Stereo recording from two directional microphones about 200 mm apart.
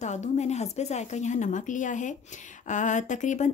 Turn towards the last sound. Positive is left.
turn(degrees=40)  # may be behind; listen again after turning